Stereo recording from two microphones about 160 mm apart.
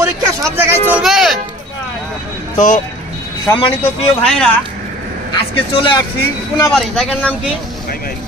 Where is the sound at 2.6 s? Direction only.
55° left (ahead or behind).